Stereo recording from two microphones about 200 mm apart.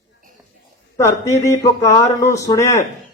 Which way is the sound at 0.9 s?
15° left (ahead or behind).